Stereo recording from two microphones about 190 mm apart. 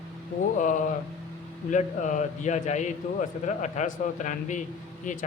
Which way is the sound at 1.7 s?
40° left (ahead or behind).